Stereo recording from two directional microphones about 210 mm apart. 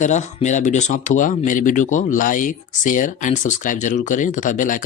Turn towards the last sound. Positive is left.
turn(degrees=40)  # may be behind; listen again after turning